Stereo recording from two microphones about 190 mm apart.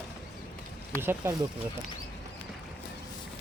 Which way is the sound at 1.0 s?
10° right (ahead or behind).